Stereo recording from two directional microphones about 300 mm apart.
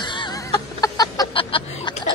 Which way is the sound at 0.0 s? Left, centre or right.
Centre.